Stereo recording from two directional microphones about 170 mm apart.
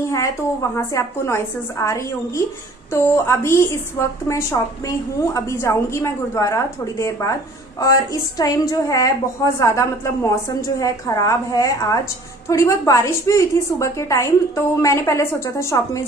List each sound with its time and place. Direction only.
0.1 s a woman's voice: 20° left (ahead or behind)